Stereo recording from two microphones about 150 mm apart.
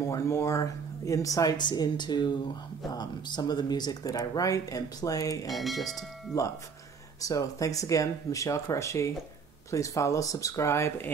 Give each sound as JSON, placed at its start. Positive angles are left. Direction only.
{"t": 0.0, "sound": "speech", "side_deg": 20}
{"t": 5.5, "sound": "speech", "side_deg": 0}
{"t": 7.2, "sound": "speech", "side_deg": 20}